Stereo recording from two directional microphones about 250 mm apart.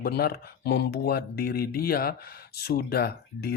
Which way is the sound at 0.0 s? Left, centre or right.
Left.